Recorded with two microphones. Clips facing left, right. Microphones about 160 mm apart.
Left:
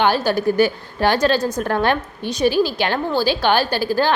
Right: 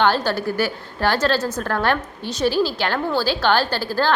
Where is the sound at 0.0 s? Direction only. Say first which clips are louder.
Left 2 dB; 15° left (ahead or behind).